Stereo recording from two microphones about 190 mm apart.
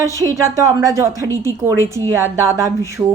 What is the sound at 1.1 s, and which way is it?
Speech, 15° left (ahead or behind).